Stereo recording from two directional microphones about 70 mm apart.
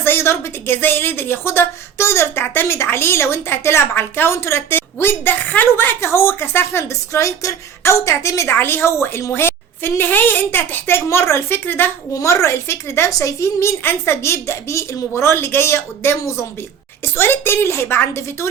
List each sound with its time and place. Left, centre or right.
0.0 s speech: left
8.4 s speech: left
12.2 s speech: left
17.2 s speech: left